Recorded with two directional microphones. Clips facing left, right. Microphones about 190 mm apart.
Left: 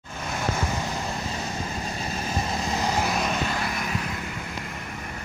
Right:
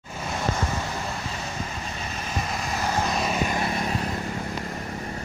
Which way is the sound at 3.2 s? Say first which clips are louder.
Right 1 dB; 10° right (ahead or behind).